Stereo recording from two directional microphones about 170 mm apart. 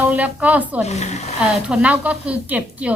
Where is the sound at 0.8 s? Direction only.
40° left (ahead or behind).